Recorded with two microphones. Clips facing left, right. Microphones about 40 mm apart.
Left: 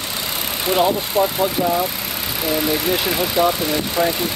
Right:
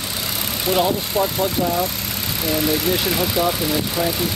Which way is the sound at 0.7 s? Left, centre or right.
Centre.